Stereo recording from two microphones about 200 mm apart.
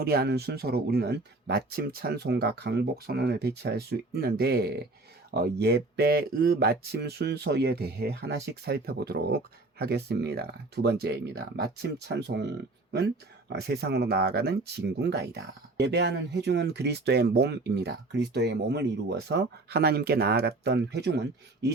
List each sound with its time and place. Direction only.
0.0 s speech: 50° right (ahead or behind)